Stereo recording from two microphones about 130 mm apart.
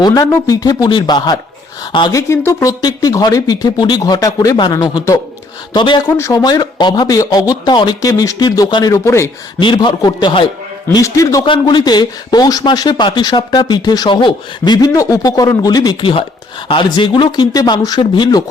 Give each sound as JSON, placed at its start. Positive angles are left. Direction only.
{"t": 0.0, "sound": "speech", "side_deg": 30}
{"t": 2.1, "sound": "speech", "side_deg": 20}
{"t": 6.1, "sound": "speech", "side_deg": 20}
{"t": 9.6, "sound": "speech", "side_deg": 35}
{"t": 10.9, "sound": "speech", "side_deg": 25}
{"t": 11.4, "sound": "speech", "side_deg": 40}